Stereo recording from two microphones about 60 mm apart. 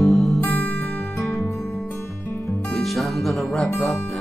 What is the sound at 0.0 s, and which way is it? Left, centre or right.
Music, centre.